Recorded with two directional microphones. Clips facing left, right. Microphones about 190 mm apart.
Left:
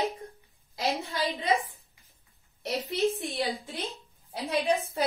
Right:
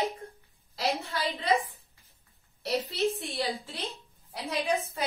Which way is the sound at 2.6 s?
15° left (ahead or behind).